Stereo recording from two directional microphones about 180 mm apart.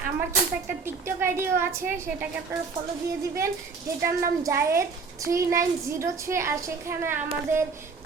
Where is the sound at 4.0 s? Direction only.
15° right (ahead or behind).